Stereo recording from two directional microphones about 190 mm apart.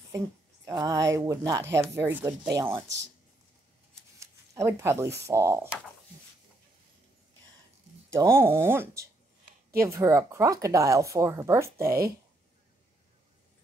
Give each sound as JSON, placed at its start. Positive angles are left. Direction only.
{"t": 0.7, "sound": "speech", "side_deg": -20}
{"t": 4.2, "sound": "a sound", "side_deg": -15}
{"t": 5.2, "sound": "speech", "side_deg": -15}
{"t": 8.1, "sound": "speech", "side_deg": -15}